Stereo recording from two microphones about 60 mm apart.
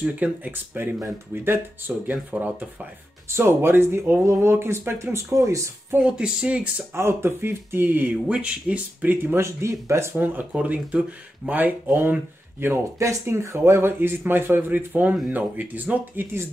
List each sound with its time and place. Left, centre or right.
0.0 s speech: right
1.3 s speech: right
3.3 s speech: right
5.9 s speech: centre
6.9 s speech: right
8.3 s speech: right
10.1 s speech: right
13.0 s speech: right